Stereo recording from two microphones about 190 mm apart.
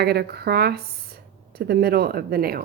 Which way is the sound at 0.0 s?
55° right (ahead or behind).